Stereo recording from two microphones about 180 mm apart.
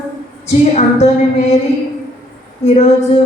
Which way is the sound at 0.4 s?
40° left (ahead or behind).